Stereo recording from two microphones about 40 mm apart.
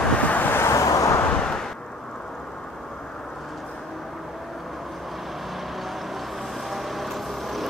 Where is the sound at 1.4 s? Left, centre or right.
Centre.